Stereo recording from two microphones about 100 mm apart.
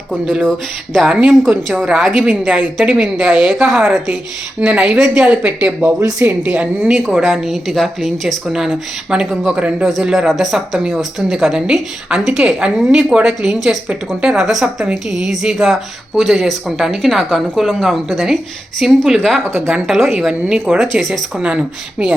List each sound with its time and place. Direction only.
0.1 s speech: 5° left (ahead or behind)
0.9 s speech: 10° right (ahead or behind)
6.0 s speech: 30° right (ahead or behind)
6.4 s speech: 10° right (ahead or behind)